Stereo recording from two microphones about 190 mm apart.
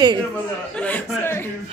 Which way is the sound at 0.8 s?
10° left (ahead or behind).